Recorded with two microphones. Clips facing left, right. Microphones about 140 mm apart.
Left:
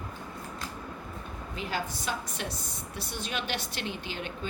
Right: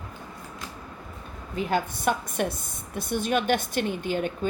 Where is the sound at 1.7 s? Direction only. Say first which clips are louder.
Right 8 dB; 55° right (ahead or behind).